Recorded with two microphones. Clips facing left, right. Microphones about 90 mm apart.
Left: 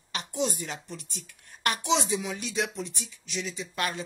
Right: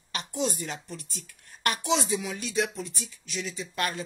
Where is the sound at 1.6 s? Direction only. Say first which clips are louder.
Even; 20° left (ahead or behind).